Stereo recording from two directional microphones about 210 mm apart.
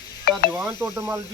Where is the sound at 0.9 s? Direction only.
15° right (ahead or behind).